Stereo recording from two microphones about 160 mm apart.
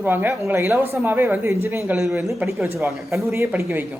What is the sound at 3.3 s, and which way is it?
Speech, 15° right (ahead or behind).